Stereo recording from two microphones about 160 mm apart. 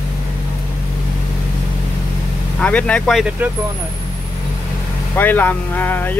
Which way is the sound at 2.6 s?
10° left (ahead or behind).